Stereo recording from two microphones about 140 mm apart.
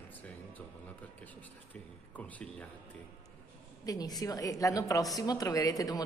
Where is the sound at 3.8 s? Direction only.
30° left (ahead or behind).